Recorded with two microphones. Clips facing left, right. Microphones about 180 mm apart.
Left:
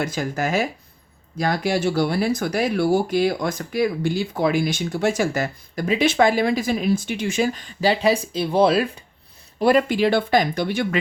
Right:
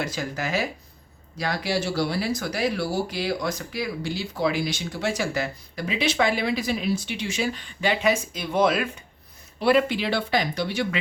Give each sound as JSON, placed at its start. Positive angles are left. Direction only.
{"t": 0.0, "sound": "speech", "side_deg": 50}
{"t": 9.6, "sound": "speech", "side_deg": 45}